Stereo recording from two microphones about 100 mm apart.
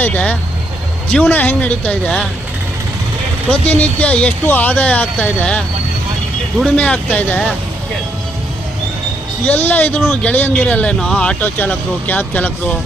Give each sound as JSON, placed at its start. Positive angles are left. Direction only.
{"t": 0.0, "sound": "speech", "side_deg": 15}
{"t": 3.5, "sound": "speech", "side_deg": 15}
{"t": 6.7, "sound": "speech", "side_deg": 15}
{"t": 9.5, "sound": "speech", "side_deg": 20}